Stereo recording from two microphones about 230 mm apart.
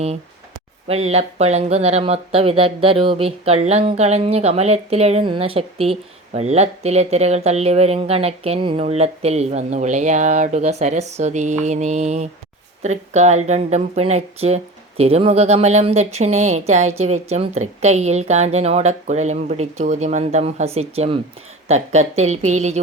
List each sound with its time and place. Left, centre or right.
0.9 s speech: right